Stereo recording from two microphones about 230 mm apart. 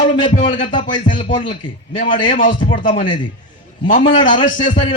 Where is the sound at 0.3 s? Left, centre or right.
Left.